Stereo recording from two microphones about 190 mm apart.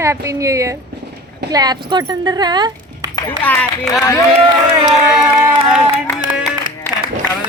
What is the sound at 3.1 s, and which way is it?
Speech, 10° left (ahead or behind).